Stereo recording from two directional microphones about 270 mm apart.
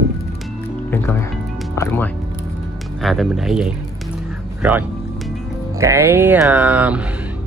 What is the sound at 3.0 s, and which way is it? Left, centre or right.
Music, centre.